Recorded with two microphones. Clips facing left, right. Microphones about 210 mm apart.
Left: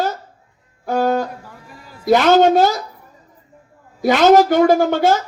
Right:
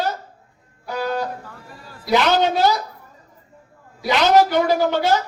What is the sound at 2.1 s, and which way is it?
Speech, 50° left (ahead or behind).